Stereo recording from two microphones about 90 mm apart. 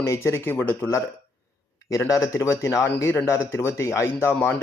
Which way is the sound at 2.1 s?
35° left (ahead or behind).